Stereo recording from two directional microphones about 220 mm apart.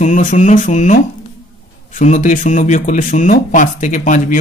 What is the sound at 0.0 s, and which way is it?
Speech, 35° left (ahead or behind).